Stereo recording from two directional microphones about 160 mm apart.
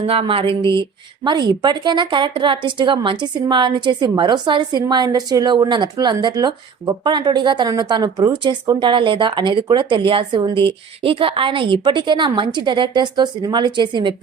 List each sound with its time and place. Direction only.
0.0 s speech: 35° right (ahead or behind)